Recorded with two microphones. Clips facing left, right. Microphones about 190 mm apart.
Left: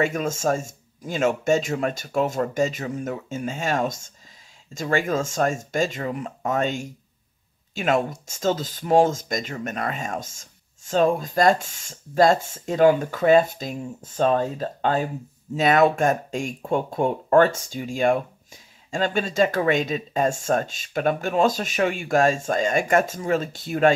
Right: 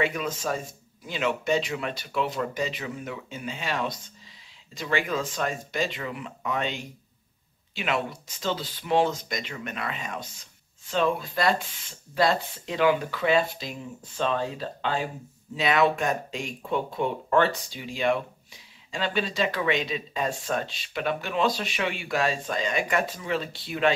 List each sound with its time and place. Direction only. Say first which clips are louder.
0.0 s speech: left 5 dB; 45° left (ahead or behind)